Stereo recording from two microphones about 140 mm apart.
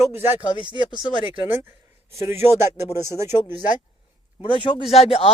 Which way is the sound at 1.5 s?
15° right (ahead or behind).